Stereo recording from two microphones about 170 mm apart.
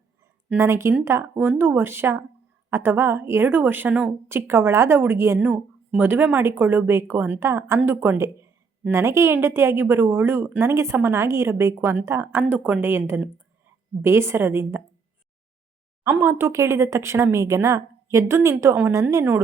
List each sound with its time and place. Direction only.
0.5 s a woman's voice: 15° right (ahead or behind)
16.0 s a woman's voice: 15° right (ahead or behind)